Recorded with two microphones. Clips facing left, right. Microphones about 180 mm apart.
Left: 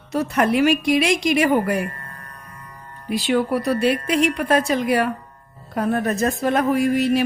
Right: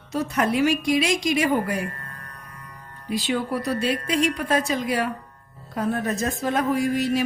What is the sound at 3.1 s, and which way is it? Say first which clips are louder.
A woman's voice: left 5 dB; 65° left (ahead or behind).